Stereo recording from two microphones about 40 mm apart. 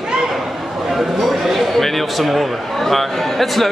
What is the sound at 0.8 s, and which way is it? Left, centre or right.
A man's voice, centre.